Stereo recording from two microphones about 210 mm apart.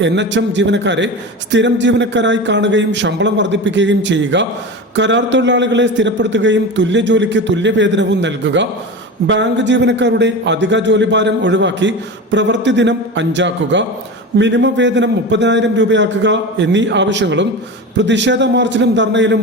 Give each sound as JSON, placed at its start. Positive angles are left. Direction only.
{"t": 0.0, "sound": "a man's voice", "side_deg": -60}